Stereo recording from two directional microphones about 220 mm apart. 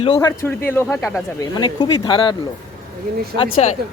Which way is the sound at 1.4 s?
20° left (ahead or behind).